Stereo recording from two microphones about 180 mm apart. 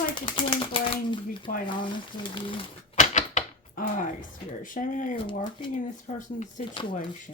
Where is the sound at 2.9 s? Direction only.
45° left (ahead or behind).